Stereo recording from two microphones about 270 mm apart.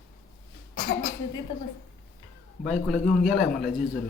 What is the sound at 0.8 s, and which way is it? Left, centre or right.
Speech, left.